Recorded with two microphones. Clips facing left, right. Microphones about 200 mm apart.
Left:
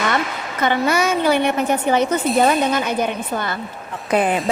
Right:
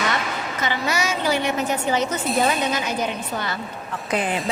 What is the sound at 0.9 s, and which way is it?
A woman's voice, 55° left (ahead or behind).